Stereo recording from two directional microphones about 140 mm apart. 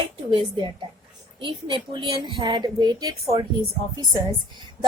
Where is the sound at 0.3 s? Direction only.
35° right (ahead or behind).